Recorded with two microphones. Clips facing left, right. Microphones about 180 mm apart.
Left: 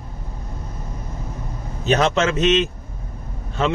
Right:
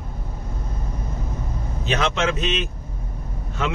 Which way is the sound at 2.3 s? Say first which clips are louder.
Left 8 dB; 90° left.